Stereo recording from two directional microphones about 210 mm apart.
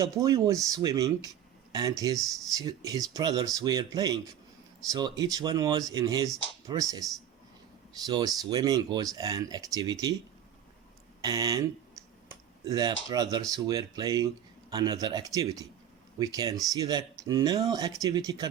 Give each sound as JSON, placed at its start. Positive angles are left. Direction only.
{"t": 0.0, "sound": "speech", "side_deg": -15}
{"t": 11.2, "sound": "speech", "side_deg": -15}